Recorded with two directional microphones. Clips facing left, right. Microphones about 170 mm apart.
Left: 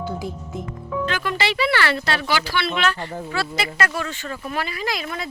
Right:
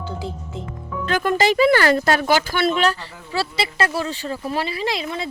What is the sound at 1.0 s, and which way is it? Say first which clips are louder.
Speech: right 7 dB; 45° right (ahead or behind).